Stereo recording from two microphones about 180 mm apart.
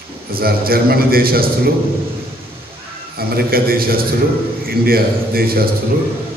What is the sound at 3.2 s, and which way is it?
A man's voice, 55° right (ahead or behind).